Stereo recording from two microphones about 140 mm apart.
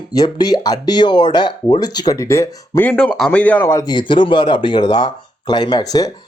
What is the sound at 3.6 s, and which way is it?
Speech, 25° left (ahead or behind).